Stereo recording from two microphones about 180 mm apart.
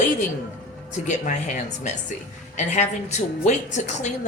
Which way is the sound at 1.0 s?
45° left (ahead or behind).